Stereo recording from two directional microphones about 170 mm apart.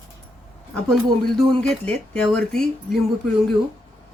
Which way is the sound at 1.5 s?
5° left (ahead or behind).